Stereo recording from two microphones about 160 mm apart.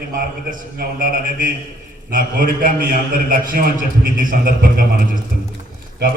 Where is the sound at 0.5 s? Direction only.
60° right (ahead or behind).